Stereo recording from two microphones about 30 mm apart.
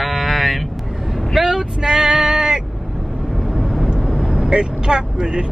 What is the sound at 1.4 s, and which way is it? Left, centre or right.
Speech, right.